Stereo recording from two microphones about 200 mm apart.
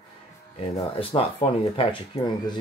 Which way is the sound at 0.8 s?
25° left (ahead or behind).